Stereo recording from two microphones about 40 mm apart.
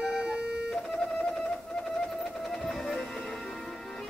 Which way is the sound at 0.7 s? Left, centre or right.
Centre.